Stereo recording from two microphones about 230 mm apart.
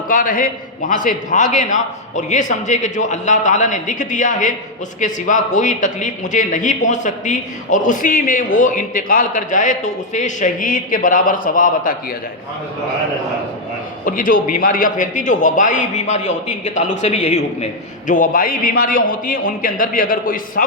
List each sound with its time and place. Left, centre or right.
0.1 s a man's voice: left
14.0 s a man's voice: left